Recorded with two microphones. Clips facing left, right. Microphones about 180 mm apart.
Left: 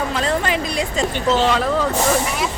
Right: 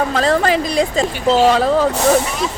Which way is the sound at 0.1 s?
35° right (ahead or behind).